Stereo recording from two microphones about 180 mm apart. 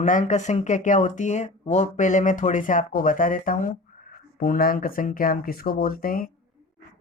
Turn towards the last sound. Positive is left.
turn(degrees=55)  # may be behind; listen again after turning